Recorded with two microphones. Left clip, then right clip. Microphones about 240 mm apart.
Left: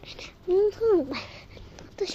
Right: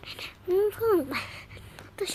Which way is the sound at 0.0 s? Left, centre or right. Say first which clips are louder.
Even; centre.